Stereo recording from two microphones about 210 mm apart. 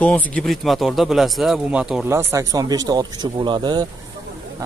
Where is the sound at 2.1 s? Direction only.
15° right (ahead or behind).